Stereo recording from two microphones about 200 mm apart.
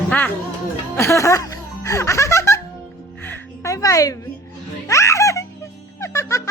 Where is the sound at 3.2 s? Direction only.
15° left (ahead or behind).